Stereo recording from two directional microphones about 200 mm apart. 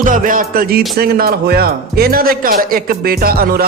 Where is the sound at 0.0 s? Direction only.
40° right (ahead or behind).